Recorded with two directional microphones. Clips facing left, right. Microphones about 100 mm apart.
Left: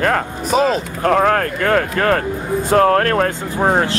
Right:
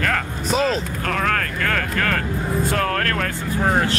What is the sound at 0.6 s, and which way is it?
Speech, 40° left (ahead or behind).